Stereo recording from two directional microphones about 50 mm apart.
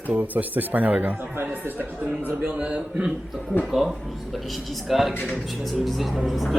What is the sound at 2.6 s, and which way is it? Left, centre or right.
Speech, centre.